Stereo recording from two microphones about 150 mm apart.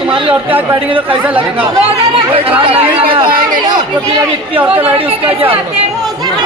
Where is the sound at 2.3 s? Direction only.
40° right (ahead or behind).